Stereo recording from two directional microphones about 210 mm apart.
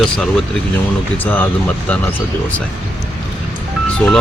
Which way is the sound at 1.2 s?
10° left (ahead or behind).